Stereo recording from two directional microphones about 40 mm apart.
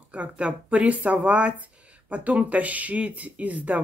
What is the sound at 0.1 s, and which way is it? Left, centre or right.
Speech, right.